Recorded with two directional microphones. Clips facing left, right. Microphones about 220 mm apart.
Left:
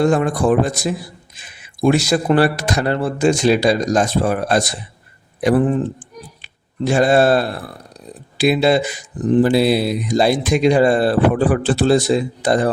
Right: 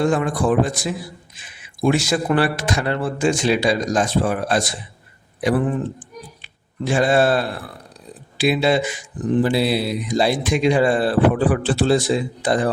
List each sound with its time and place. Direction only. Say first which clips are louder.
0.0 s speech: left 3 dB; 40° left (ahead or behind)
6.4 s a sound: left 6 dB; 40° left (ahead or behind)
8.4 s speech: left 3 dB; 40° left (ahead or behind)